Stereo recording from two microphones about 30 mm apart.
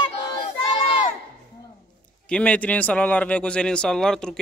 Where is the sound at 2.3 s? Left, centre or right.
Left.